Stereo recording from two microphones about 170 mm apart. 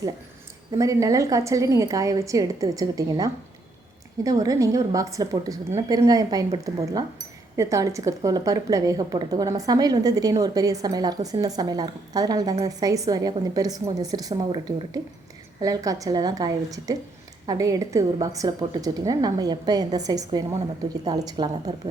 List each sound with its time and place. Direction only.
0.7 s a woman's voice: 20° right (ahead or behind)